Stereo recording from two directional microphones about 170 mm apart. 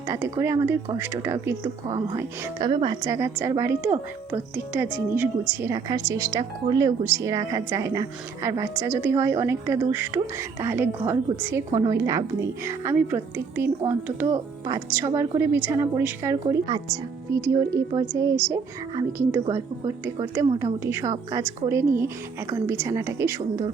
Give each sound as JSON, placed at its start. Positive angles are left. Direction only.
{"t": 0.1, "sound": "a woman's voice", "side_deg": -15}
{"t": 2.6, "sound": "a woman's voice", "side_deg": -30}
{"t": 3.0, "sound": "a woman's voice", "side_deg": -15}